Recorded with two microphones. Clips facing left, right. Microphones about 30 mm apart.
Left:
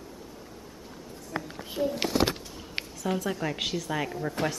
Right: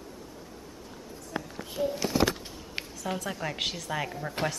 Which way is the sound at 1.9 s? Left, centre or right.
Left.